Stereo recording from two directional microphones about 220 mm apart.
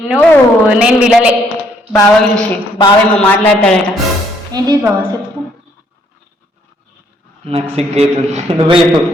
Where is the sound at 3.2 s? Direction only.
5° left (ahead or behind).